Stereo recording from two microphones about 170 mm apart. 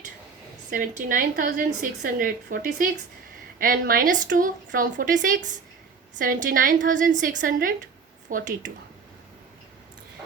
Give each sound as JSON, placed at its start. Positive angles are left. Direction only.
{"t": 0.7, "sound": "a woman's voice", "side_deg": -50}